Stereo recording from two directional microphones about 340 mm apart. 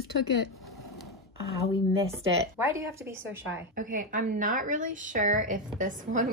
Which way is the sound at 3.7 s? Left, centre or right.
Right.